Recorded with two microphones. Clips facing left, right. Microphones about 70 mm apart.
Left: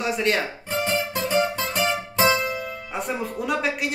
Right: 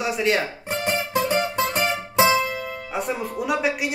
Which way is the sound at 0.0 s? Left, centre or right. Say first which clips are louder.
Right 1 dB; centre.